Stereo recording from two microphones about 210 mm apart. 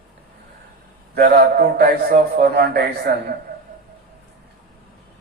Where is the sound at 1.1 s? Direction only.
45° right (ahead or behind).